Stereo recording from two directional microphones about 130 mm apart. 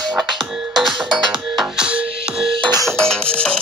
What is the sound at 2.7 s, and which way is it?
Music, 25° right (ahead or behind).